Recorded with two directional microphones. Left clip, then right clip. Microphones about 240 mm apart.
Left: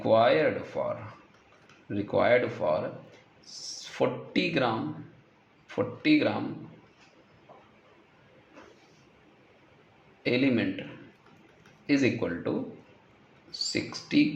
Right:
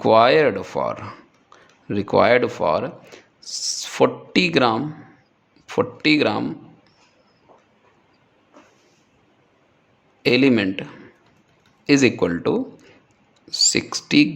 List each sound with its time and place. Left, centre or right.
0.0 s speech: right
10.2 s speech: right
11.9 s speech: right